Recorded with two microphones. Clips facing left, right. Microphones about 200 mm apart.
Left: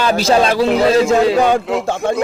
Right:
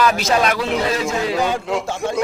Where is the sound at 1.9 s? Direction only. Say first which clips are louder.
Left 5 dB; 55° left (ahead or behind).